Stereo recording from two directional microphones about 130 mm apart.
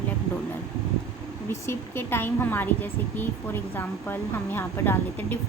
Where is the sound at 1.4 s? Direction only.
20° left (ahead or behind).